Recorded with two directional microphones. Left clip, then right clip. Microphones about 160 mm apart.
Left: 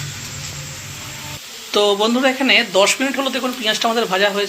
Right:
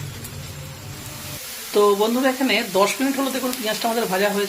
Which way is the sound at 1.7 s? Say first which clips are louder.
Left 2 dB; 10° left (ahead or behind).